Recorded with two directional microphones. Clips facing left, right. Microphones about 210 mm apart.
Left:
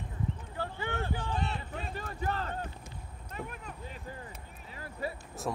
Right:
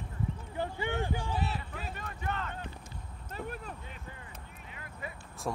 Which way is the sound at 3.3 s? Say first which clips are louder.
Right 2 dB; 35° right (ahead or behind).